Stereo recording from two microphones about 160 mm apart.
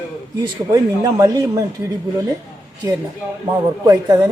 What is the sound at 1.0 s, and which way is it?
Speech, 20° right (ahead or behind).